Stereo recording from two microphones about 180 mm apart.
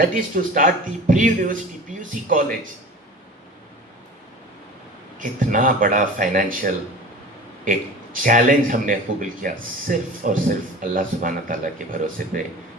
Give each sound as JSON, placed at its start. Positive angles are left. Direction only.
{"t": 0.0, "sound": "speech", "side_deg": -50}
{"t": 5.2, "sound": "speech", "side_deg": -50}